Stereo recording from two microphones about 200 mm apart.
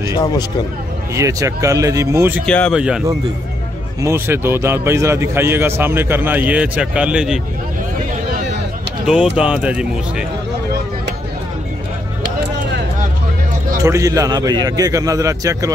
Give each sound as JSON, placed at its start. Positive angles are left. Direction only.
{"t": 0.1, "sound": "speech", "side_deg": 20}
{"t": 1.1, "sound": "a man's voice", "side_deg": -15}
{"t": 2.4, "sound": "speech", "side_deg": 5}
{"t": 4.0, "sound": "a man's voice", "side_deg": -10}
{"t": 9.0, "sound": "speech", "side_deg": -5}
{"t": 13.7, "sound": "a man's voice", "side_deg": -15}